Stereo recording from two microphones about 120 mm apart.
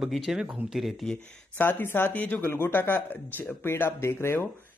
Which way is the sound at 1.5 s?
15° left (ahead or behind).